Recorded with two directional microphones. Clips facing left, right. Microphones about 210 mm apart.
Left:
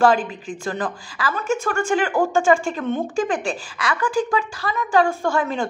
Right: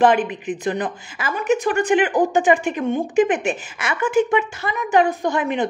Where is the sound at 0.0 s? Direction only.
20° right (ahead or behind).